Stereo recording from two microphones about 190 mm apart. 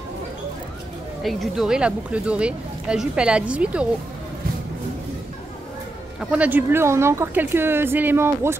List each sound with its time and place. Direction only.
1.2 s speech: centre (ahead or behind)
6.1 s speech: 5° right (ahead or behind)